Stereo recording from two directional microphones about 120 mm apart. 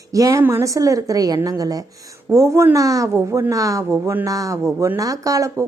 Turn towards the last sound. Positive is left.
turn(degrees=-25)  # may be behind; listen again after turning